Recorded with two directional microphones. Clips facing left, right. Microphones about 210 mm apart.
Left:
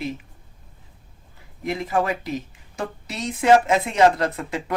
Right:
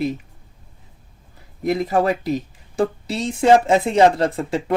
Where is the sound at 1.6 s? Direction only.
40° right (ahead or behind).